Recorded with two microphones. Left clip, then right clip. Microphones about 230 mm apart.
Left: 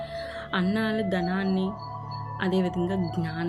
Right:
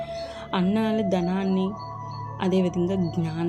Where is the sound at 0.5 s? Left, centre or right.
Centre.